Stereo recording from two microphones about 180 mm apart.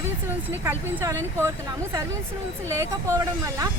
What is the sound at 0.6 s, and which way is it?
Speech, 15° right (ahead or behind).